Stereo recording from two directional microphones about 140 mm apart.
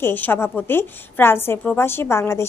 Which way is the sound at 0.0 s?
15° left (ahead or behind).